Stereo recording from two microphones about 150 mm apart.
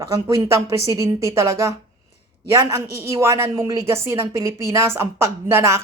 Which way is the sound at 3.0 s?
20° right (ahead or behind).